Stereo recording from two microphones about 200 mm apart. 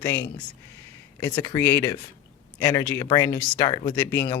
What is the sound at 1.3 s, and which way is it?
Speech, 25° left (ahead or behind).